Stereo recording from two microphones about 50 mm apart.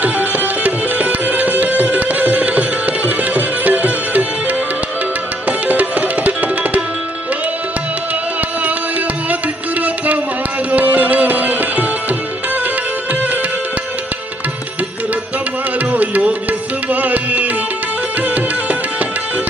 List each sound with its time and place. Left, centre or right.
0.0 s music: right
5.5 s tabla: right
8.4 s music: right
10.7 s tabla: right
15.9 s music: right